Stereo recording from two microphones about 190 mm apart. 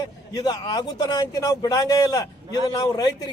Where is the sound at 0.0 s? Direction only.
20° left (ahead or behind).